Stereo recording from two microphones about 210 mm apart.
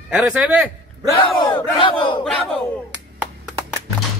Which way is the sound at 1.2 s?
25° left (ahead or behind).